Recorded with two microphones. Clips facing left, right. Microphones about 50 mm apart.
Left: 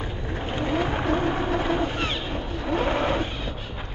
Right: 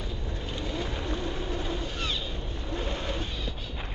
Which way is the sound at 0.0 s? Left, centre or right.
Left.